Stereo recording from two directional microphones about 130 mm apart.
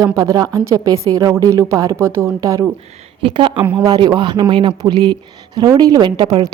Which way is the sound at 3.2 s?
40° right (ahead or behind).